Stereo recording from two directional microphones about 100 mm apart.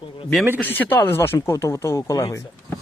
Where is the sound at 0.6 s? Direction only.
20° left (ahead or behind).